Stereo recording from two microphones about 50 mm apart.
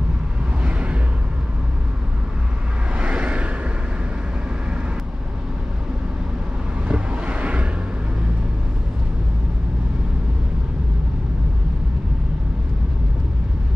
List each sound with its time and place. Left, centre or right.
0.7 s a sound: right
3.0 s vehicle: right
6.9 s vehicle: right